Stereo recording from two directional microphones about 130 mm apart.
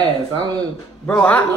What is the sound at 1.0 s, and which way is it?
Speech, 10° left (ahead or behind).